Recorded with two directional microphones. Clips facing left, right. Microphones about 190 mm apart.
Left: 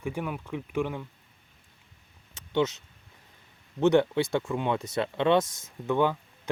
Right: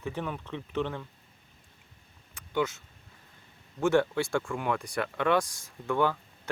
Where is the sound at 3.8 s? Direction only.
20° left (ahead or behind).